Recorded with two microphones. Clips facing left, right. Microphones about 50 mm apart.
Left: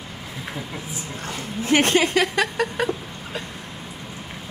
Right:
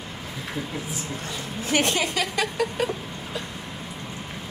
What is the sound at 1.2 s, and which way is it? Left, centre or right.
Speech, left.